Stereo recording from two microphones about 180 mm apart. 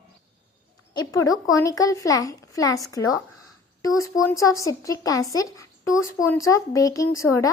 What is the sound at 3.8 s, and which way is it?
Speech, 20° left (ahead or behind).